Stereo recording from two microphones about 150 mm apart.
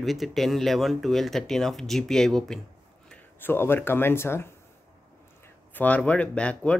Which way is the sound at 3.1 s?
15° left (ahead or behind).